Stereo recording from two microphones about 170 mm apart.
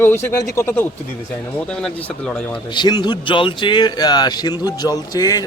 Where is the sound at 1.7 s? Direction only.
5° left (ahead or behind).